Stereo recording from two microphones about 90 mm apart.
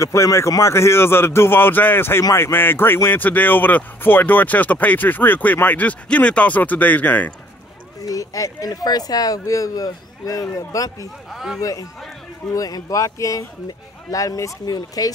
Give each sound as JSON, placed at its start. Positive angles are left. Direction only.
{"t": 0.0, "sound": "speech", "side_deg": 35}
{"t": 8.0, "sound": "speech", "side_deg": 40}
{"t": 11.2, "sound": "speech", "side_deg": 0}
{"t": 11.6, "sound": "speech", "side_deg": 40}